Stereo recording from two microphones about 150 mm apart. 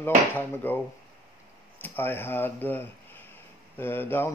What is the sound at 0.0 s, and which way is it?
A man's voice, 15° left (ahead or behind).